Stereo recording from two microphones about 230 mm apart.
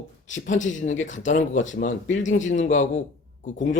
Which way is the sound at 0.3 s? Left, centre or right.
Left.